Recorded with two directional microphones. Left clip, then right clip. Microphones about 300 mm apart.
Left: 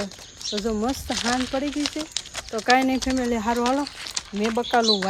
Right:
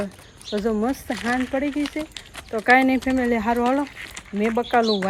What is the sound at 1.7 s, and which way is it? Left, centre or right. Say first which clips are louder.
Speech: even; left.